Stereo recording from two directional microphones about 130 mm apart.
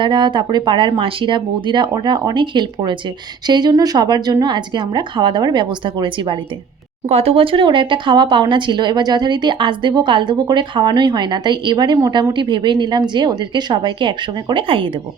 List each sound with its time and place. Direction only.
0.0 s speech: 35° right (ahead or behind)
7.1 s speech: 50° right (ahead or behind)